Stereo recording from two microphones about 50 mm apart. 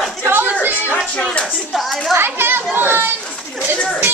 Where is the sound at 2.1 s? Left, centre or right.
Right.